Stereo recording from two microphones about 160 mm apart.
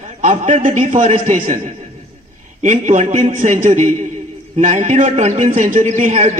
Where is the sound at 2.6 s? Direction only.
50° right (ahead or behind).